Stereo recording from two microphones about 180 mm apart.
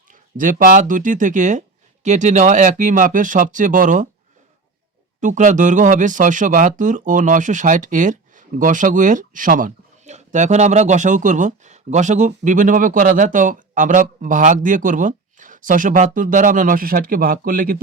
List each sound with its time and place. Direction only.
0.1 s speech: 50° right (ahead or behind)
5.2 s speech: 45° right (ahead or behind)